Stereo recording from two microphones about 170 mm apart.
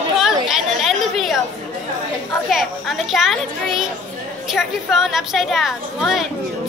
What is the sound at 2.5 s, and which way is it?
A woman's voice, centre (ahead or behind).